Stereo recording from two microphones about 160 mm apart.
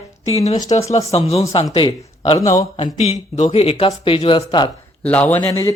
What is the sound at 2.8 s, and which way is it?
Speech, 45° left (ahead or behind).